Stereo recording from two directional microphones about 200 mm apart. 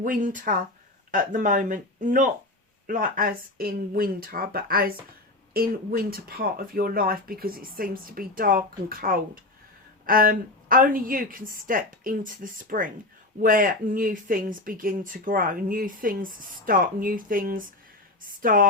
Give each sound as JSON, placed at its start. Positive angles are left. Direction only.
{"t": 0.0, "sound": "speech", "side_deg": -40}